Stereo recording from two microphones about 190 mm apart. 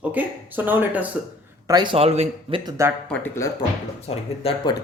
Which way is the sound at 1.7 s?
25° right (ahead or behind).